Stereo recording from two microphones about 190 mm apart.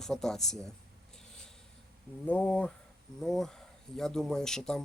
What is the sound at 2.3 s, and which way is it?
Speech, 5° left (ahead or behind).